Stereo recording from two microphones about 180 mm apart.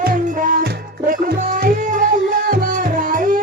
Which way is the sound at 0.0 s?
55° right (ahead or behind).